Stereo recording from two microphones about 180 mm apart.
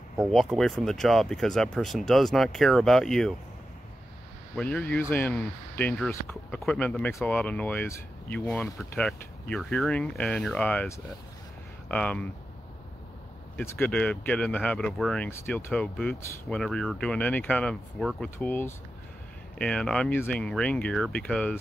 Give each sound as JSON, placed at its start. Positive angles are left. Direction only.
{"t": 0.2, "sound": "speech", "side_deg": 0}
{"t": 4.6, "sound": "speech", "side_deg": 10}
{"t": 13.6, "sound": "speech", "side_deg": 10}